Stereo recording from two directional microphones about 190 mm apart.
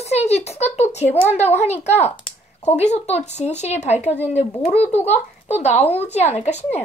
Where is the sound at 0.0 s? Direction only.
35° left (ahead or behind).